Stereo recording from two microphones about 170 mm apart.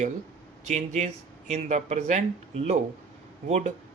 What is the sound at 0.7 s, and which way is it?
Speech, 40° right (ahead or behind).